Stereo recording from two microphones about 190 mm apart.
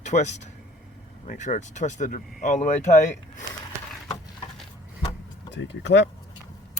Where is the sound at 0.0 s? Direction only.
40° left (ahead or behind).